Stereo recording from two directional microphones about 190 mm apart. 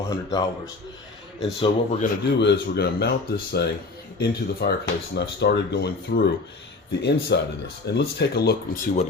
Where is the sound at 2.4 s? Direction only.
60° left (ahead or behind).